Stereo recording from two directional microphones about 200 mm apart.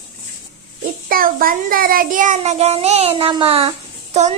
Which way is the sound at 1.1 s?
45° right (ahead or behind).